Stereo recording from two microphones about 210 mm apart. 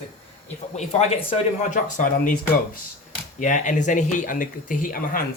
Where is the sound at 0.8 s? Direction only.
30° left (ahead or behind).